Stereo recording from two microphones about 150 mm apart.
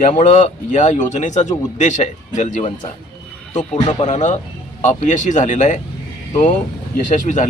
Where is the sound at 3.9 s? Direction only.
55° left (ahead or behind).